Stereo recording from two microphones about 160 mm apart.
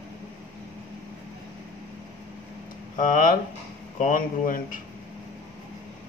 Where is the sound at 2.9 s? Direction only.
55° left (ahead or behind).